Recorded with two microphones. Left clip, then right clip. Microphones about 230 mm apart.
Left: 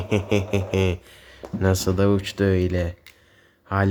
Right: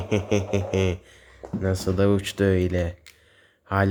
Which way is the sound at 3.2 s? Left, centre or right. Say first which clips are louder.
Left 1 dB; centre.